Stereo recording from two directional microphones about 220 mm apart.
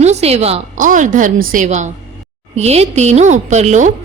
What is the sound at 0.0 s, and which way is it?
A woman's voice, 30° right (ahead or behind).